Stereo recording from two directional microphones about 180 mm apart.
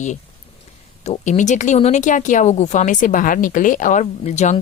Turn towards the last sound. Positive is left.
turn(degrees=40)  # may be behind; listen again after turning